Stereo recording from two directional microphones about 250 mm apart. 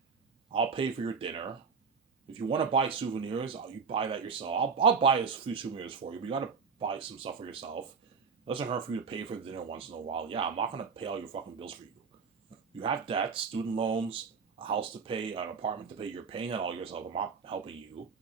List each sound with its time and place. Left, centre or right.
0.5 s speech: right
2.5 s speech: right
12.8 s speech: right